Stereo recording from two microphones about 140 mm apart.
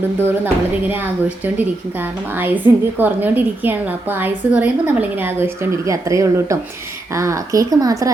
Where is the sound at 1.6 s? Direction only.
15° right (ahead or behind).